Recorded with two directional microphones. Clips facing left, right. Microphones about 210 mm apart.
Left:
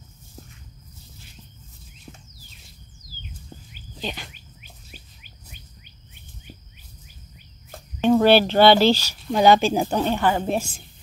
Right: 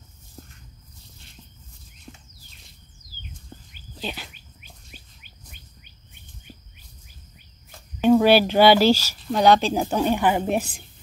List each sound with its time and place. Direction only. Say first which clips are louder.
4.0 s speech: left 1 dB; 5° right (ahead or behind)
8.0 s speech: even; 10° right (ahead or behind)
10.0 s speech: right 1 dB; 15° right (ahead or behind)